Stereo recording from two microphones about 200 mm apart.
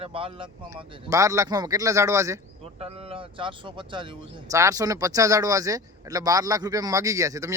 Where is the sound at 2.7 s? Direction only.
30° right (ahead or behind).